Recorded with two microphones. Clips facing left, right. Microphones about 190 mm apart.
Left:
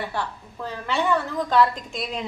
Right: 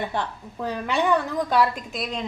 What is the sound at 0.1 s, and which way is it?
A woman's voice, 15° right (ahead or behind).